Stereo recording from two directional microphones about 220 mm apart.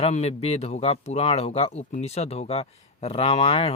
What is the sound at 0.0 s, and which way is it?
Speech, 30° left (ahead or behind).